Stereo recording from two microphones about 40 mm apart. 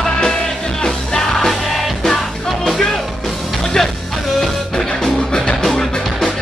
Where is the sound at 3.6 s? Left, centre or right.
Centre.